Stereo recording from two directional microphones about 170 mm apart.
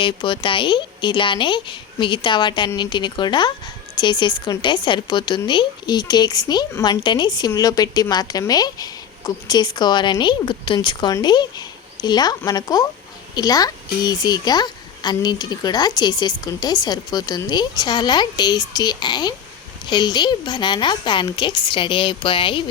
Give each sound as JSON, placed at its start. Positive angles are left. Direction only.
{"t": 0.0, "sound": "a woman's voice", "side_deg": 30}